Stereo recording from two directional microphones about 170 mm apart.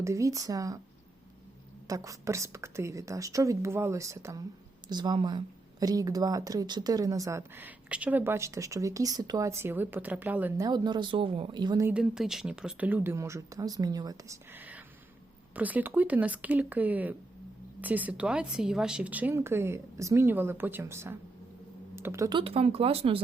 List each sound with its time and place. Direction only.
0.0 s speech: 20° right (ahead or behind)
1.9 s a woman's voice: 20° right (ahead or behind)
10.6 s speech: 25° right (ahead or behind)
11.9 s a woman's voice: 5° right (ahead or behind); by 14.3 s 20° right (ahead or behind)
14.5 s whispering: 10° right (ahead or behind)
15.5 s a woman's voice: 10° right (ahead or behind)
22.3 s speech: 30° right (ahead or behind)